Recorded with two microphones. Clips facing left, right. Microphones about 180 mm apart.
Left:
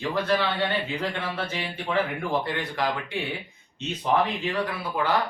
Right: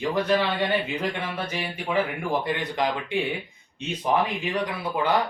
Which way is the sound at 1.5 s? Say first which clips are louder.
Right 1 dB; 10° right (ahead or behind).